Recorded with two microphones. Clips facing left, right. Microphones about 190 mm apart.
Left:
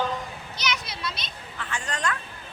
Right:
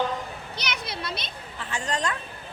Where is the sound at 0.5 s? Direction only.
60° right (ahead or behind).